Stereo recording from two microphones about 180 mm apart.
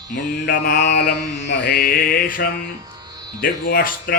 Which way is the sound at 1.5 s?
65° left (ahead or behind).